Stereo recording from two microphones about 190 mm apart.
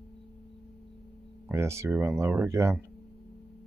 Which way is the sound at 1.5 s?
15° right (ahead or behind).